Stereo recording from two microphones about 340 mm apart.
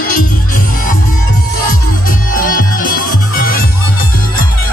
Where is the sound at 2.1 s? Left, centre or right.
Left.